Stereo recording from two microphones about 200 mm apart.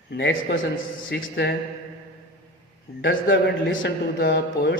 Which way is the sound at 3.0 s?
65° left (ahead or behind).